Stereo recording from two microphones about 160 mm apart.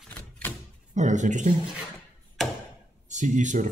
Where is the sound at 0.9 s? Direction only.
50° right (ahead or behind).